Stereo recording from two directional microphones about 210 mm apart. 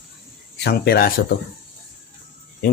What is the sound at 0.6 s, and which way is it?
Speech, 50° left (ahead or behind).